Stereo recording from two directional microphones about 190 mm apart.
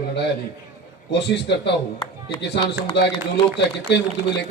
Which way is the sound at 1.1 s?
65° left (ahead or behind).